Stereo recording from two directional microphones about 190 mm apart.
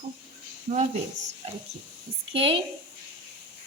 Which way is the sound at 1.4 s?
35° right (ahead or behind).